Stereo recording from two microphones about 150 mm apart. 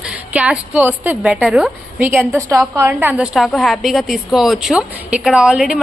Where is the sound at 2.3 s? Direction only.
20° right (ahead or behind).